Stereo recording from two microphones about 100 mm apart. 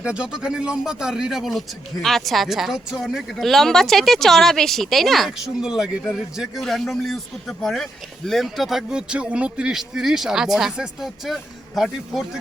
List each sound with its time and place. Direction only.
0.0 s a man's voice: 10° right (ahead or behind)